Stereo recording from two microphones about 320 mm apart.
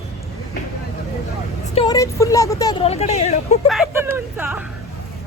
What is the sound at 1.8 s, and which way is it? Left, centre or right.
Speech, centre.